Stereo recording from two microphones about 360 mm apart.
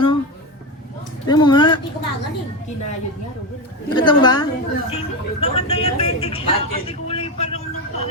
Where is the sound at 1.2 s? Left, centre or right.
Centre.